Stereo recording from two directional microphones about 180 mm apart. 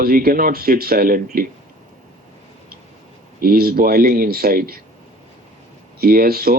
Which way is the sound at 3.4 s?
55° right (ahead or behind).